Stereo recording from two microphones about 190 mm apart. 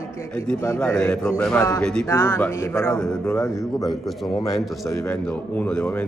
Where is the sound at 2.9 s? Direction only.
5° left (ahead or behind).